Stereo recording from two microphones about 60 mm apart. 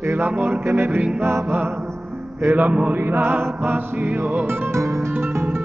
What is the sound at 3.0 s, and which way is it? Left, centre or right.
Music, right.